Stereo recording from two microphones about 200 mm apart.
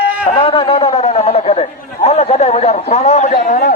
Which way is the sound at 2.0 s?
30° left (ahead or behind).